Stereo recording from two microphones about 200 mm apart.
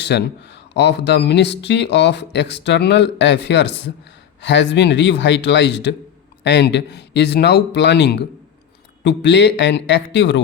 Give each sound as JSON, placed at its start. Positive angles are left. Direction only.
{"t": 0.0, "sound": "speech", "side_deg": 60}